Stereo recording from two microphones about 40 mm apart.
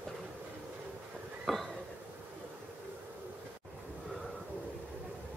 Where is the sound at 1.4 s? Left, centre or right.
Centre.